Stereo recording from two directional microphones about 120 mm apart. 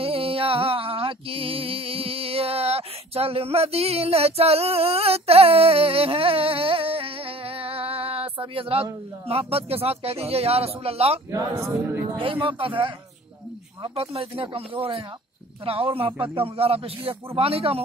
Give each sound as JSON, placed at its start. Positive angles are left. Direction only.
{"t": 0.0, "sound": "music", "side_deg": -50}
{"t": 9.3, "sound": "a man's voice", "side_deg": -55}
{"t": 11.3, "sound": "a woman's voice", "side_deg": -25}
{"t": 12.2, "sound": "speech", "side_deg": -45}
{"t": 13.9, "sound": "a man's voice", "side_deg": -50}